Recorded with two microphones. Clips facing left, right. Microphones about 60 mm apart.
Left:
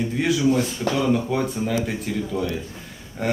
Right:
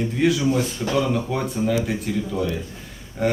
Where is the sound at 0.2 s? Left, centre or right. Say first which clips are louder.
Even; centre.